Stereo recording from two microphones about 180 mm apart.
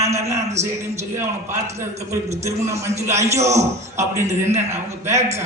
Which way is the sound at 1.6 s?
40° right (ahead or behind).